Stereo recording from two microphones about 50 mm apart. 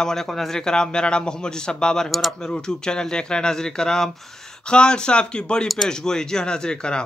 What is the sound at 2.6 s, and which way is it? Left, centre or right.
Speech, centre.